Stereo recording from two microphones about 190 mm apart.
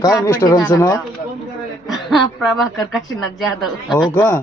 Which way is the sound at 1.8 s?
Centre (ahead or behind).